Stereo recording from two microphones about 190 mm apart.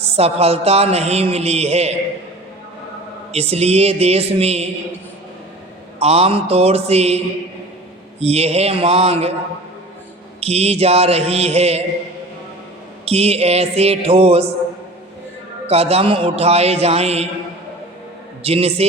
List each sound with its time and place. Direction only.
0.0 s speech: 35° right (ahead or behind)
3.3 s speech: 35° right (ahead or behind)
6.0 s speech: 30° right (ahead or behind)
8.2 s speech: 35° right (ahead or behind)
10.4 s speech: 35° right (ahead or behind)
13.1 s speech: 30° right (ahead or behind)
15.6 s speech: 30° right (ahead or behind)
18.4 s speech: 30° right (ahead or behind)